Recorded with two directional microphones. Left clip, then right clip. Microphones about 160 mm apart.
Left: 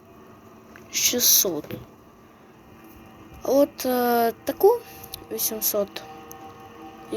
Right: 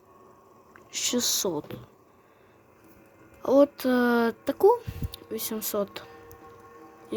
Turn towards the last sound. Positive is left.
turn(degrees=-60)  # may be behind; listen again after turning